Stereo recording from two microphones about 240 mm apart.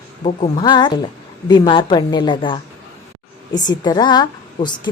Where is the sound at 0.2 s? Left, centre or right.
Left.